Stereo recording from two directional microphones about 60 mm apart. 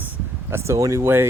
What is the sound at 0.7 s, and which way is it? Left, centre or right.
Speech, right.